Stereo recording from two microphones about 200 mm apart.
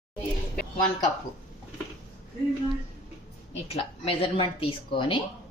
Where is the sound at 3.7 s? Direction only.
30° left (ahead or behind).